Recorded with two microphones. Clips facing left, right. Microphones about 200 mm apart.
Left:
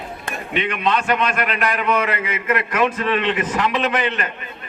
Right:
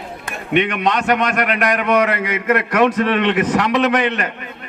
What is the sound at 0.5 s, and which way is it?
A man's voice, 65° right (ahead or behind).